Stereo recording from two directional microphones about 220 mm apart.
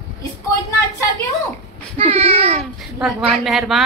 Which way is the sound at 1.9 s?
25° right (ahead or behind).